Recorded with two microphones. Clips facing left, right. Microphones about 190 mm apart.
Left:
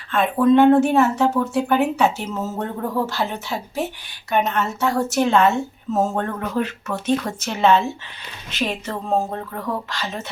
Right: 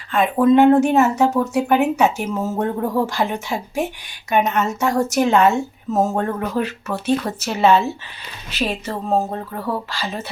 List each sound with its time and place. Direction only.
0.1 s speech: 10° right (ahead or behind)
4.9 s a woman's voice: 40° right (ahead or behind)
5.2 s speech: 15° right (ahead or behind)